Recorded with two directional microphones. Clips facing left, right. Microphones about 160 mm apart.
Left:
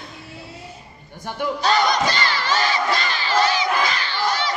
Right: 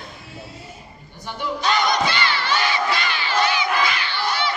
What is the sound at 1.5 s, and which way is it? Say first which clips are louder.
Battle cry: left 1 dB; 35° left (ahead or behind).